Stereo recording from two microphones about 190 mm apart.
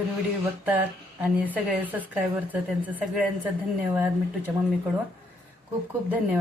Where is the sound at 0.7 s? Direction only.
10° right (ahead or behind).